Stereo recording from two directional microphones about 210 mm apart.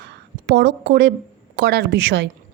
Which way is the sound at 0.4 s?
55° right (ahead or behind).